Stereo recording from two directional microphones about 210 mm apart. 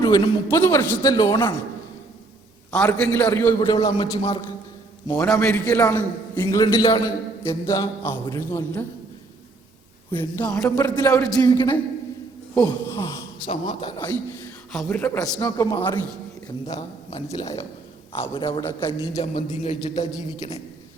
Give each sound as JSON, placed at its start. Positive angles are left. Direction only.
{"t": 0.0, "sound": "a man's voice", "side_deg": 15}
{"t": 2.7, "sound": "a man's voice", "side_deg": 5}
{"t": 3.6, "sound": "a man's voice", "side_deg": 20}
{"t": 5.2, "sound": "a man's voice", "side_deg": 5}
{"t": 10.2, "sound": "a man's voice", "side_deg": 10}
{"t": 14.8, "sound": "a man's voice", "side_deg": 10}
{"t": 18.3, "sound": "a man's voice", "side_deg": 25}
{"t": 19.2, "sound": "a man's voice", "side_deg": 30}